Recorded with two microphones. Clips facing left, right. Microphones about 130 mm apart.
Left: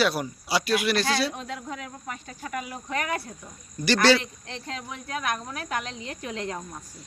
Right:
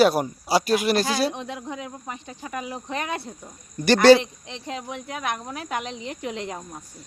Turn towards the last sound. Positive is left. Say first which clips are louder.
# right 2 dB
turn(degrees=-20)  # may be behind; listen again after turning